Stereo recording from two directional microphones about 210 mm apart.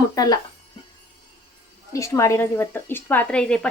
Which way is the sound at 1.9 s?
15° left (ahead or behind).